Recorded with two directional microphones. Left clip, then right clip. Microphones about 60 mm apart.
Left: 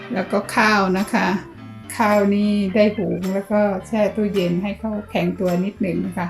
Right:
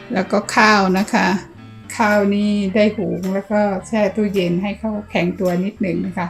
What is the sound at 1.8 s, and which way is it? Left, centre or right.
Speech, right.